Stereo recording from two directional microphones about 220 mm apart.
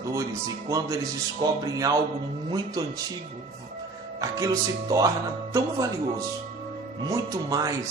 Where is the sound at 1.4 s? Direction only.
20° right (ahead or behind).